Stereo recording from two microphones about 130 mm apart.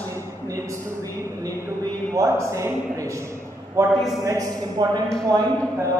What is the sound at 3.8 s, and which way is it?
Speech, centre (ahead or behind).